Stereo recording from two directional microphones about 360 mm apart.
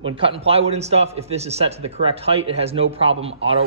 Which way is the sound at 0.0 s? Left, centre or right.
Centre.